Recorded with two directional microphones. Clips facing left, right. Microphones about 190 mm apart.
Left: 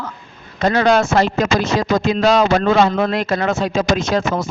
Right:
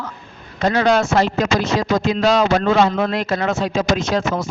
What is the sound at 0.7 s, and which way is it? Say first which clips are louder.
Speech: left 2 dB; 50° left (ahead or behind).